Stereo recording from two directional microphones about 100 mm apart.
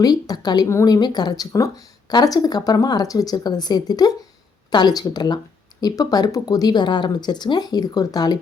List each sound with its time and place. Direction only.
0.0 s speech: 40° left (ahead or behind)